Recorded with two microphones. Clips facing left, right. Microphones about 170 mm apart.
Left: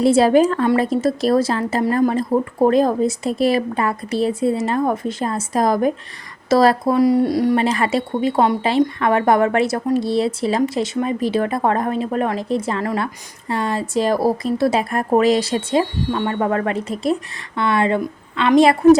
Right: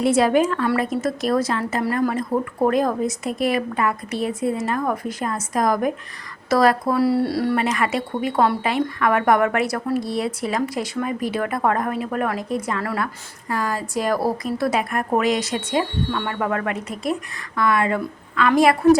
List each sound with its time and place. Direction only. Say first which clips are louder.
0.0 s a woman's voice: left 4 dB; 30° left (ahead or behind)
7.6 s a woman's voice: left 3 dB; 30° left (ahead or behind)